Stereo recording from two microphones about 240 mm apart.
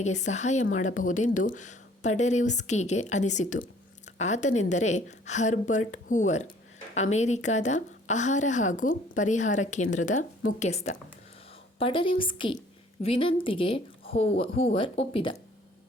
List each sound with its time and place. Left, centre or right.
0.0 s speech: left